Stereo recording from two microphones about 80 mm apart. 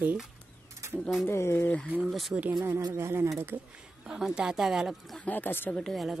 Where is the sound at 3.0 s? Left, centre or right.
Right.